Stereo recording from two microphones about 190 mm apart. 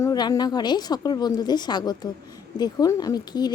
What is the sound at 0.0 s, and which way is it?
A woman's voice, 20° left (ahead or behind).